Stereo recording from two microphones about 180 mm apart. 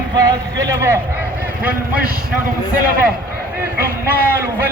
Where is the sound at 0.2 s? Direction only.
20° right (ahead or behind).